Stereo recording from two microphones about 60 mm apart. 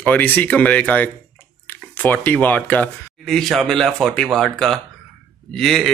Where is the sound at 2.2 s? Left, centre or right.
Left.